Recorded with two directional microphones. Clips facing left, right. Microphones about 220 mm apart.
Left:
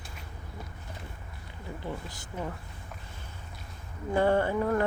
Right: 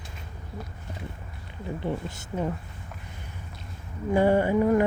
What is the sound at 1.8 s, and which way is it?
Speech, 25° right (ahead or behind).